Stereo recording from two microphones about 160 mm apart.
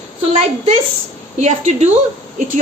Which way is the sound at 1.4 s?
45° right (ahead or behind).